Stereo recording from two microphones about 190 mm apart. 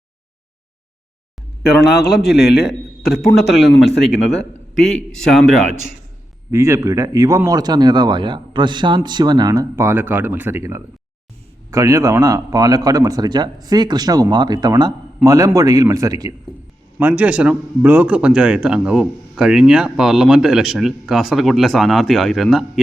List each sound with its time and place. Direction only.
2.0 s a man's voice: centre (ahead or behind)
6.5 s speech: 15° right (ahead or behind)
17.0 s speech: 10° right (ahead or behind)